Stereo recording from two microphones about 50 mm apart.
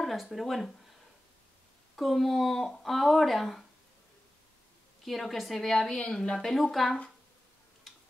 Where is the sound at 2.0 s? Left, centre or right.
Centre.